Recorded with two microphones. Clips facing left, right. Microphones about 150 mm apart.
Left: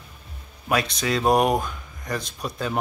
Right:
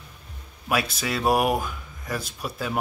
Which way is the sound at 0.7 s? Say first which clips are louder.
Left 2 dB; 5° right (ahead or behind).